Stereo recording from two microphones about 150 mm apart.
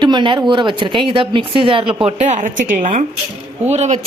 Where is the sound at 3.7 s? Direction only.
45° right (ahead or behind).